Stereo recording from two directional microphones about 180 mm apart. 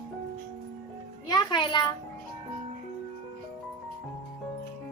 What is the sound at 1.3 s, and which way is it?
Music, 25° left (ahead or behind).